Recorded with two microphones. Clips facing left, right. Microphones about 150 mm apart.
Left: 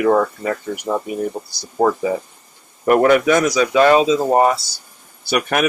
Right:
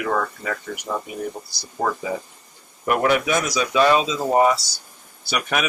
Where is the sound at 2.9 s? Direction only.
50° left (ahead or behind).